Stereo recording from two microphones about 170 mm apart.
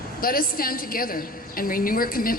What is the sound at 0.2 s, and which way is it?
A woman's voice, 60° left (ahead or behind).